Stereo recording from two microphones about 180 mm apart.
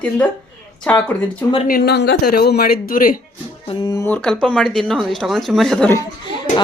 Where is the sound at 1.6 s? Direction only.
60° left (ahead or behind).